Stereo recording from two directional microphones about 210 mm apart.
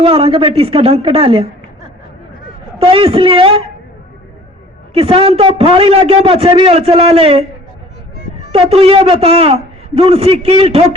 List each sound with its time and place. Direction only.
0.0 s a man's voice: 25° right (ahead or behind)
2.7 s a man's voice: 25° right (ahead or behind)
4.9 s a man's voice: 30° right (ahead or behind)
8.5 s a man's voice: 30° right (ahead or behind)